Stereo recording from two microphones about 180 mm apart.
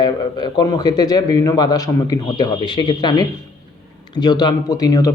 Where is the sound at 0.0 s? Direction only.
25° left (ahead or behind).